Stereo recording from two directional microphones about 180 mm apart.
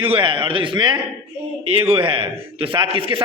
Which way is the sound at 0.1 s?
25° right (ahead or behind).